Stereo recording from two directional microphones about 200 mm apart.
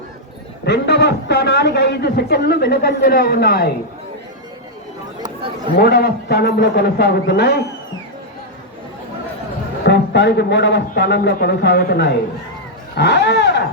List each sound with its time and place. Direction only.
0.6 s a man's voice: 55° left (ahead or behind)
5.7 s a man's voice: 55° left (ahead or behind)
9.8 s a man's voice: 60° left (ahead or behind)